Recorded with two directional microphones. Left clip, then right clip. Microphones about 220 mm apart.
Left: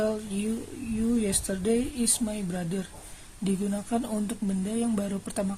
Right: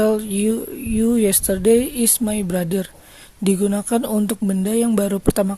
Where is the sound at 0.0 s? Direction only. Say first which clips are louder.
Right 11 dB; 45° right (ahead or behind).